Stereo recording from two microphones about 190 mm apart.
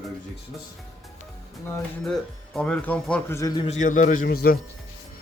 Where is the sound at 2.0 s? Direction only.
Centre (ahead or behind).